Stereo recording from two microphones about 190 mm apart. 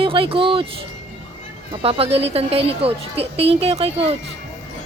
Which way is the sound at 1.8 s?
30° right (ahead or behind).